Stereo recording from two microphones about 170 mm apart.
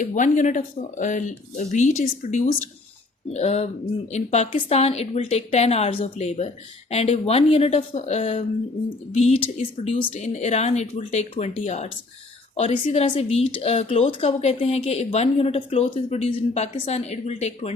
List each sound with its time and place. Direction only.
0.0 s a woman's voice: 50° left (ahead or behind); by 10.2 s 30° left (ahead or behind)
10.2 s a woman's voice: 45° left (ahead or behind)